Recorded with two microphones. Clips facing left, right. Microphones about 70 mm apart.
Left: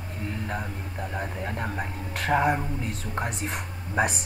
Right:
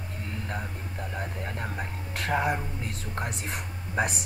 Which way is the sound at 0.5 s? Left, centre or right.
Centre.